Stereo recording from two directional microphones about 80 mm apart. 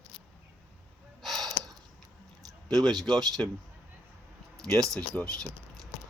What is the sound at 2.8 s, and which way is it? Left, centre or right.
Speech, centre.